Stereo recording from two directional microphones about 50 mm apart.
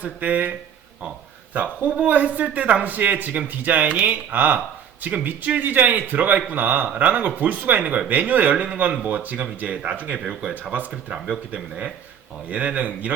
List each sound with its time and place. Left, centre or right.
0.0 s a man's voice: right
1.5 s a man's voice: right
12.5 s a man's voice: right